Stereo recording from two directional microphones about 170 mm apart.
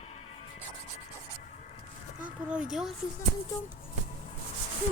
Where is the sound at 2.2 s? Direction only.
5° right (ahead or behind).